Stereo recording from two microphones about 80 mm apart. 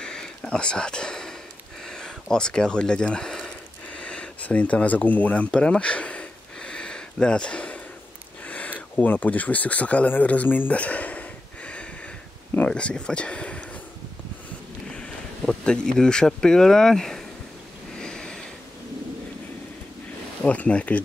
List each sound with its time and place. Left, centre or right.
0.0 s whispering: centre
1.9 s a sound: centre
8.5 s speech: centre
14.9 s speech: centre
17.9 s a sound: centre
20.4 s speech: centre